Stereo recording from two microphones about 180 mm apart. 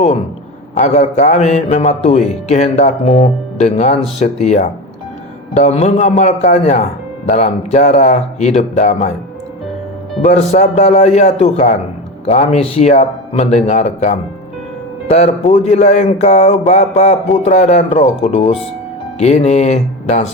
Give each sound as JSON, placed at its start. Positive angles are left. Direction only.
{"t": 0.9, "sound": "speech", "side_deg": 40}
{"t": 10.2, "sound": "speech", "side_deg": 40}